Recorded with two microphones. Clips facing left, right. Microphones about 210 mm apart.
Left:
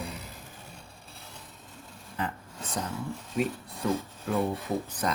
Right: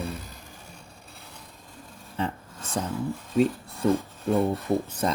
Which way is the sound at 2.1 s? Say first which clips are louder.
Right 4 dB; 25° right (ahead or behind).